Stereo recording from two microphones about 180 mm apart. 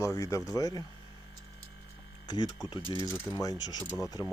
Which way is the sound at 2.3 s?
25° left (ahead or behind).